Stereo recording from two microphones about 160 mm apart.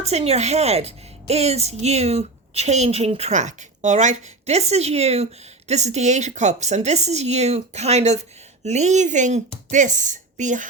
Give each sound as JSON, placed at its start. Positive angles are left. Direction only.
{"t": 0.0, "sound": "a woman's voice", "side_deg": -40}